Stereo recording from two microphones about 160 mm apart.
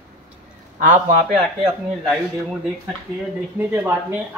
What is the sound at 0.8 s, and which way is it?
Speech, 50° right (ahead or behind).